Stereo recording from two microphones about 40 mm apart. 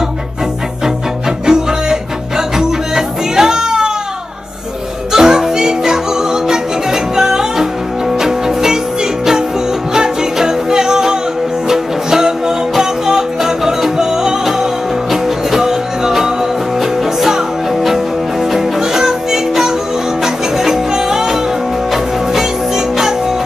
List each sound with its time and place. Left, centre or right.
1.4 s music: centre
3.3 s cat: centre
5.1 s music: centre
9.9 s music: centre